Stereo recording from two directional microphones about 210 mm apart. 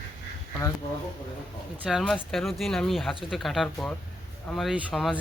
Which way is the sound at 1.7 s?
5° right (ahead or behind).